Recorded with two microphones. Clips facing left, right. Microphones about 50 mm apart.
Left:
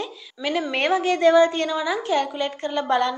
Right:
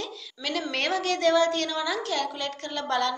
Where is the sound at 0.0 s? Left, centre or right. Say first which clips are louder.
Left 6 dB; centre.